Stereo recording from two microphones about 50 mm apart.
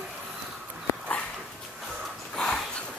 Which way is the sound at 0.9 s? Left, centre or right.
Left.